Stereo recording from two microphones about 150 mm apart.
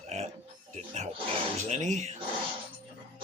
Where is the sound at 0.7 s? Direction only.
50° right (ahead or behind).